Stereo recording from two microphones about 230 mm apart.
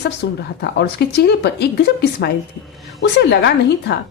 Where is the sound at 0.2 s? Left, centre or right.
Left.